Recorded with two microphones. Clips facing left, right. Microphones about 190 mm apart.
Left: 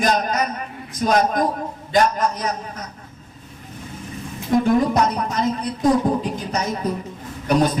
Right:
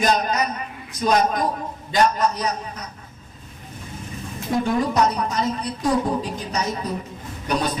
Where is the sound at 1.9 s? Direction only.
50° left (ahead or behind).